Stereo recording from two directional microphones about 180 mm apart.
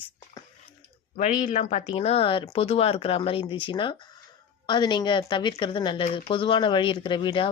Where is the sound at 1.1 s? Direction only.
40° left (ahead or behind).